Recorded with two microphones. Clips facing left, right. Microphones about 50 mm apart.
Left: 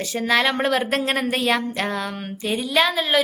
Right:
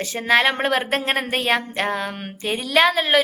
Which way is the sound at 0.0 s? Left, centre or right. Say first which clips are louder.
Right 2 dB; right.